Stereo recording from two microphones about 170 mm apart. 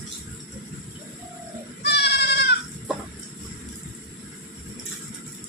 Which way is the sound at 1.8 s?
80° left.